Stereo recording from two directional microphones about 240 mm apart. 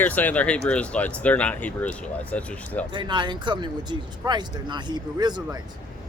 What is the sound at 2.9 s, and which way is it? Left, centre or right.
Speech, centre.